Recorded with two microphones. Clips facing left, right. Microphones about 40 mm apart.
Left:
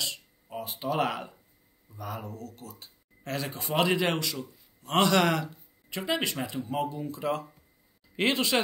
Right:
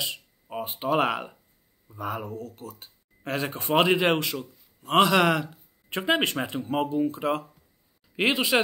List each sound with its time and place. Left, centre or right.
0.0 s speech: right
4.8 s a man's voice: centre
5.9 s speech: right
8.2 s speech: centre